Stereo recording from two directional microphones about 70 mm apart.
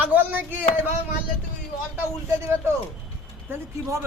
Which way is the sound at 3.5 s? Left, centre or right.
Right.